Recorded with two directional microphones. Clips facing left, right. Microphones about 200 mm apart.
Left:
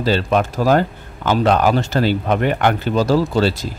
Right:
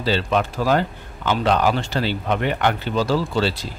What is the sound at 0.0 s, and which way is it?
Speech, 45° left (ahead or behind).